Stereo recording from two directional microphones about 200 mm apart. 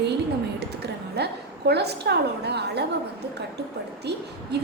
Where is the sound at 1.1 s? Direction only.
55° right (ahead or behind).